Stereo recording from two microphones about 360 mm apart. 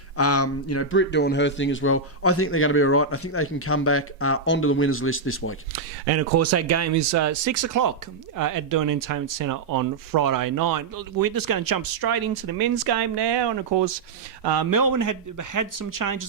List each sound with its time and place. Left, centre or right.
0.2 s speech: left
5.7 s speech: right
14.4 s speech: right